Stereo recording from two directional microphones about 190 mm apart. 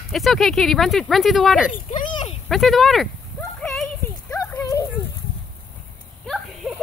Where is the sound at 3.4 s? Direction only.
5° left (ahead or behind).